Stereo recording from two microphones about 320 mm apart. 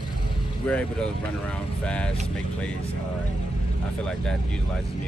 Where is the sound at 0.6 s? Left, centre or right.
Centre.